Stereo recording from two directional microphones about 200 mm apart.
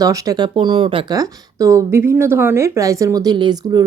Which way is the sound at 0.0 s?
15° right (ahead or behind).